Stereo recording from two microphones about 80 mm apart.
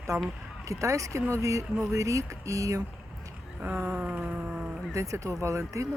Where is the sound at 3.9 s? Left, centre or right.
Centre.